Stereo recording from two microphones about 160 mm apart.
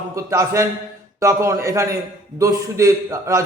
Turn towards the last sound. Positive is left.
turn(degrees=-20)  # may be behind; listen again after turning